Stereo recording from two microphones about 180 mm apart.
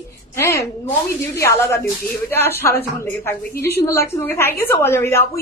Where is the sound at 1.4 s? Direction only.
15° left (ahead or behind).